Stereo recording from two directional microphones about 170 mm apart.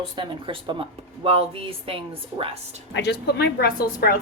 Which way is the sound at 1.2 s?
35° right (ahead or behind).